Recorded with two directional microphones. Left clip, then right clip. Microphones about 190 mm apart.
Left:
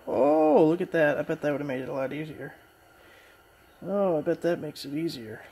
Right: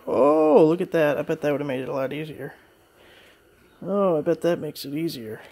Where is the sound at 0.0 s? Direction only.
35° right (ahead or behind).